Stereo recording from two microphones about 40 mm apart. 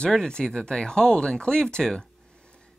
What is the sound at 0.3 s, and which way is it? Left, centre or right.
Speech, left.